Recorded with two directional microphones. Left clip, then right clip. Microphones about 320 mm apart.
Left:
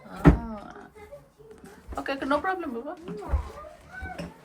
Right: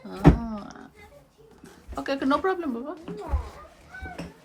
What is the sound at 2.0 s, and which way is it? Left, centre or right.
Speech, right.